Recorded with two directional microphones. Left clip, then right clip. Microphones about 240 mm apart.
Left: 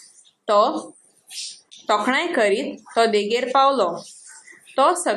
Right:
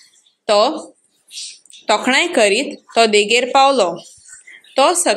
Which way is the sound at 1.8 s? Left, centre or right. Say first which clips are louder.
Right 5 dB; right.